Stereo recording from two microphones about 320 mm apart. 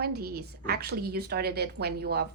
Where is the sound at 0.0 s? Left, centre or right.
Right.